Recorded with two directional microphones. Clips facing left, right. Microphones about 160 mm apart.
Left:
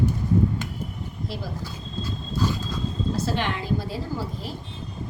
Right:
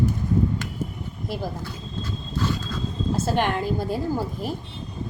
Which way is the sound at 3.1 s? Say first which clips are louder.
Right 6 dB; 50° right (ahead or behind).